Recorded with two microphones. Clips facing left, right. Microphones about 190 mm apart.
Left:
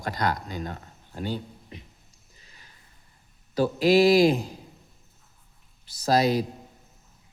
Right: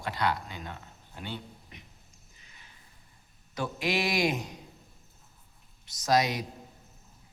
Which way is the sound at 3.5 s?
35° left (ahead or behind).